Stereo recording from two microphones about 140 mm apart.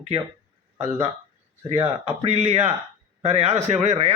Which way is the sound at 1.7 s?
45° right (ahead or behind).